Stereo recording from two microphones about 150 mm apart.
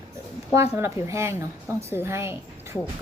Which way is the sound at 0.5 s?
15° right (ahead or behind).